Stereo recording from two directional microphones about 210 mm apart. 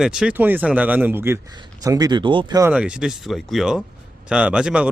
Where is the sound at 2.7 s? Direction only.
5° right (ahead or behind).